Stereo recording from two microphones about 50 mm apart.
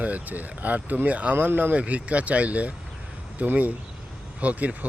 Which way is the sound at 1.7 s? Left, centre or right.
Right.